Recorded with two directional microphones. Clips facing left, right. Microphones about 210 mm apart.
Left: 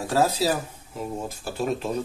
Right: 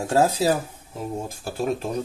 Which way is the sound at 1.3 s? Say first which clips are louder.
Right 2 dB; 45° right (ahead or behind).